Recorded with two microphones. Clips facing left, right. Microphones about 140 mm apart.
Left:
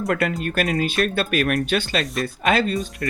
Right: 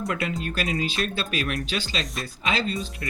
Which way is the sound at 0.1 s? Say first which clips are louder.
Left 6 dB; 55° left (ahead or behind).